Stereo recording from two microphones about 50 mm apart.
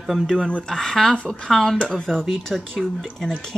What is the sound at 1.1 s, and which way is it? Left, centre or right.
Speech, left.